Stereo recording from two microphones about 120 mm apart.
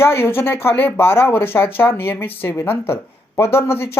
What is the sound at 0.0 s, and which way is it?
Speech, 20° left (ahead or behind).